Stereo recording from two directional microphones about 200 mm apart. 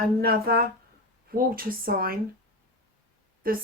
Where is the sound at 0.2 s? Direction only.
50° right (ahead or behind).